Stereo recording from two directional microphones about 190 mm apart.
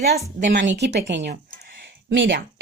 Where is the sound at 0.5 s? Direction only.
70° right (ahead or behind).